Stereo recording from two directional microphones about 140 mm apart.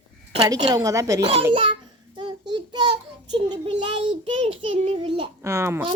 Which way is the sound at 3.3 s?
35° right (ahead or behind).